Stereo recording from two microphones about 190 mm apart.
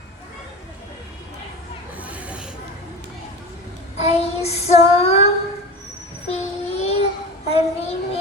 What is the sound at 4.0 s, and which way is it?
Child singing, 35° left (ahead or behind).